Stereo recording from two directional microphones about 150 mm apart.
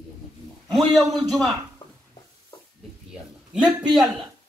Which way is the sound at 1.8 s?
35° left (ahead or behind).